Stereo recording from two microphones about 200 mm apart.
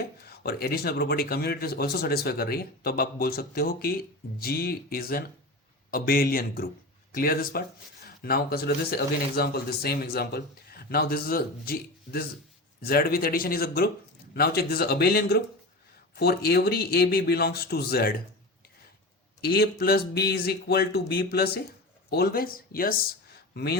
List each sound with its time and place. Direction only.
0.3 s speech: 50° left (ahead or behind)
19.4 s speech: 50° left (ahead or behind)